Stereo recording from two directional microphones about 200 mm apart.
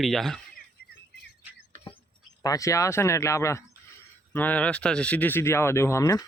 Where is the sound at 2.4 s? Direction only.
15° left (ahead or behind).